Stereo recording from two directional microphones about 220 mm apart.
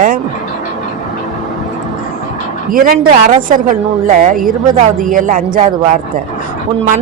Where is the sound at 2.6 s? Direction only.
40° right (ahead or behind).